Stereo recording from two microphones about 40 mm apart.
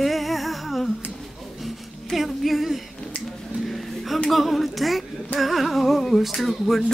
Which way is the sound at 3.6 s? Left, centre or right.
Centre.